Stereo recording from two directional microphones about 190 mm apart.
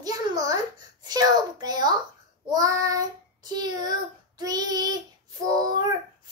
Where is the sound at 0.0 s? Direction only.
20° right (ahead or behind).